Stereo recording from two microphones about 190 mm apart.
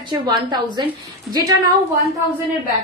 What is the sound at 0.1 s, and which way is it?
Speech, 25° right (ahead or behind).